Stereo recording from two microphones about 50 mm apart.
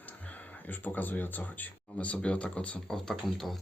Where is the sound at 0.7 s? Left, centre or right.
Left.